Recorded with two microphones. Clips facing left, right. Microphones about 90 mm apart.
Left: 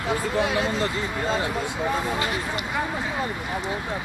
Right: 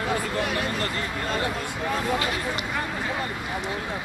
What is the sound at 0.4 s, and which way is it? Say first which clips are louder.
Speech: left 3 dB; 20° left (ahead or behind).